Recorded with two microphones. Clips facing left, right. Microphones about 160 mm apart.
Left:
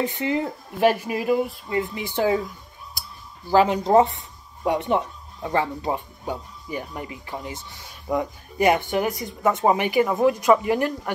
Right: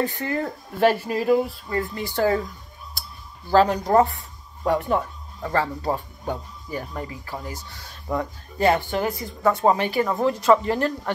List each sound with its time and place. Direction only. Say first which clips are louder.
0.0 s speech: left 1 dB; 20° left (ahead or behind)
3.4 s speech: even; 15° left (ahead or behind)